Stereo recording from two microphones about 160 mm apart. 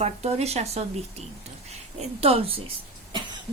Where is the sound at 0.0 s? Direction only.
40° right (ahead or behind).